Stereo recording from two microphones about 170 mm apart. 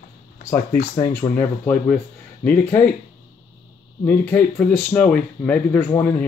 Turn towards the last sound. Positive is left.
turn(degrees=15)  # may be behind; listen again after turning